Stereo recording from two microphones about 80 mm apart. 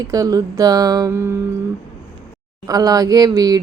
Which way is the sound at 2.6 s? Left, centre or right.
Right.